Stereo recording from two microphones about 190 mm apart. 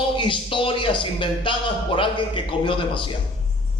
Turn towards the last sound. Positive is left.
turn(degrees=25)  # may be behind; listen again after turning